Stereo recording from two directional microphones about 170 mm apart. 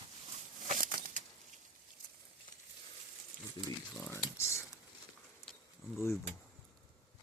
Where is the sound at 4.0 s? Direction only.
15° left (ahead or behind).